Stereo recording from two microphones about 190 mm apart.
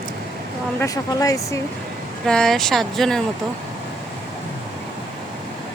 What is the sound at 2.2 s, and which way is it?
Speech, 5° left (ahead or behind).